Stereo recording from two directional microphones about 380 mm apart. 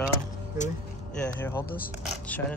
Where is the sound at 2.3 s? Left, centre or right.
Centre.